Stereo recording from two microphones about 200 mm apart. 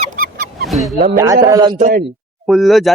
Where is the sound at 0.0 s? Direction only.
40° right (ahead or behind).